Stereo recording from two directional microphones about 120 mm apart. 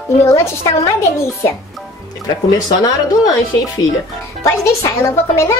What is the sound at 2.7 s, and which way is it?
A woman's voice, 30° left (ahead or behind).